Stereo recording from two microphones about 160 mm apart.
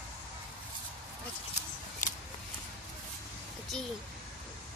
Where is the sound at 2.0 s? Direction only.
55° left (ahead or behind).